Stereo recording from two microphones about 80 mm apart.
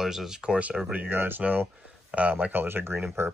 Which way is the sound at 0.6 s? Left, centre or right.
Centre.